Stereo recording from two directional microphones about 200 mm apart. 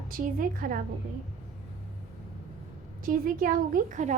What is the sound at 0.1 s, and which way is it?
Speech, 45° right (ahead or behind).